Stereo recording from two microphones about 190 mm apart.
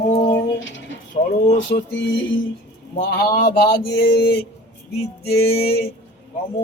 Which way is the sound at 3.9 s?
60° left (ahead or behind).